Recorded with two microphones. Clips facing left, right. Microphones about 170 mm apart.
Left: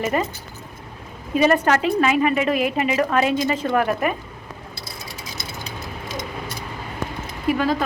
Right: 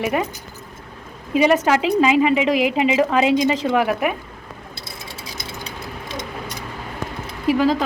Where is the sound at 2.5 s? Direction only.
90° right.